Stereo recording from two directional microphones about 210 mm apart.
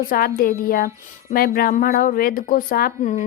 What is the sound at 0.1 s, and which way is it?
Speech, 45° left (ahead or behind).